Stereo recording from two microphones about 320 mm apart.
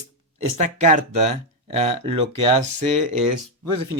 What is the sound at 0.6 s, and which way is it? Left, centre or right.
Speech, right.